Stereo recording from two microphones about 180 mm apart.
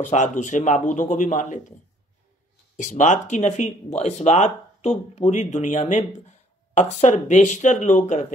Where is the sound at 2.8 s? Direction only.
45° left (ahead or behind).